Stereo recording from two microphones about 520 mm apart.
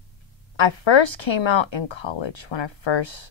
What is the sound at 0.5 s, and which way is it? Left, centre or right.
Speech, left.